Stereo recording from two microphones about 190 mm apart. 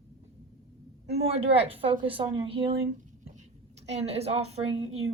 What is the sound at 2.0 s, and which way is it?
A woman's voice, 25° right (ahead or behind).